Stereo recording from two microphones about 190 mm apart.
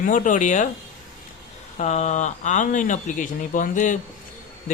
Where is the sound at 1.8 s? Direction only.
35° left (ahead or behind).